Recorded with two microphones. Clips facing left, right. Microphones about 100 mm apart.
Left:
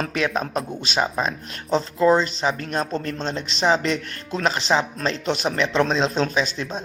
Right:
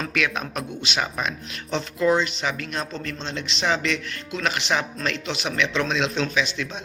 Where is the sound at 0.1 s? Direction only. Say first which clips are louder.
Left 3 dB; 30° left (ahead or behind).